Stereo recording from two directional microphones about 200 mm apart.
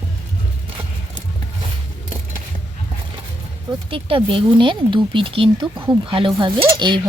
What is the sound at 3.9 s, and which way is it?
Speech, 25° right (ahead or behind).